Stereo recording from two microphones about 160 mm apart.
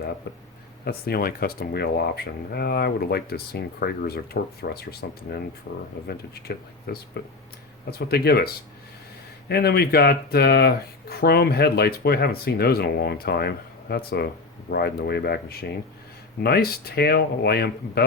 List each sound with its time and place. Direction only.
0.9 s speech: 75° left (ahead or behind)
6.5 s speech: 80° left
6.9 s speech: 90° left
7.9 s speech: 75° left (ahead or behind)
9.5 s speech: 85° left